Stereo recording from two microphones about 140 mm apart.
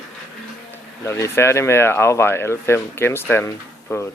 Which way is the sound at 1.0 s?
20° left (ahead or behind).